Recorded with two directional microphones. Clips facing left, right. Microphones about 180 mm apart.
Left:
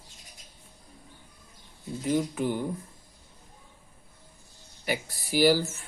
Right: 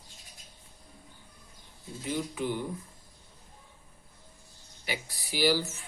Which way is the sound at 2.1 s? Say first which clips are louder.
Left 5 dB; 45° left (ahead or behind).